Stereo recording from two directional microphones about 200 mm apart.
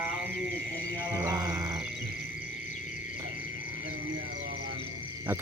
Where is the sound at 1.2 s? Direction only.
20° right (ahead or behind).